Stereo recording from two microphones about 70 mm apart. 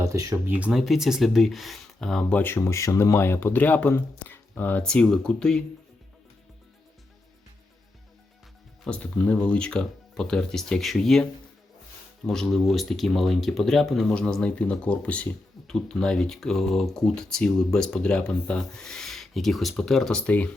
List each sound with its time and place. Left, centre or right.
0.0 s speech: right
0.4 s speech: right
0.7 s speech: centre
2.3 s speech: left
2.6 s speech: left
4.8 s speech: centre
8.8 s speech: centre
20.2 s speech: left